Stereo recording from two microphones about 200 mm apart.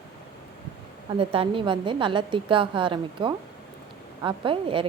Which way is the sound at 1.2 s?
25° right (ahead or behind).